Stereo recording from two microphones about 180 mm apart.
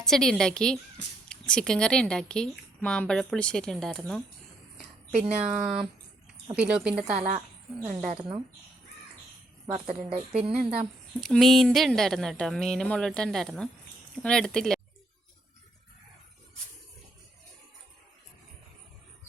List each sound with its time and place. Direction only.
0.0 s a woman's voice: centre (ahead or behind)
5.1 s speech: 35° right (ahead or behind)
5.4 s a woman's voice: 5° right (ahead or behind)
8.1 s speech: 30° right (ahead or behind)
9.7 s speech: 35° right (ahead or behind)
10.6 s a woman's voice: 5° right (ahead or behind)